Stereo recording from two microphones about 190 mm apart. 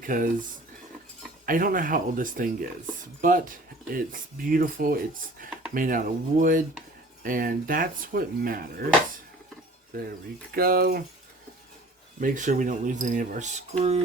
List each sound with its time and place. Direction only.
0.0 s speech: 45° right (ahead or behind)
1.5 s speech: 45° right (ahead or behind)
10.5 s speech: 50° right (ahead or behind)
12.2 s speech: 40° right (ahead or behind)